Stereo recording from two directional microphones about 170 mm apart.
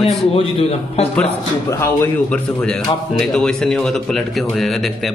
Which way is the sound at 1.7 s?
15° left (ahead or behind).